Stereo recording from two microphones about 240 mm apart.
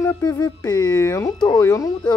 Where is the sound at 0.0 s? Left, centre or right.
Centre.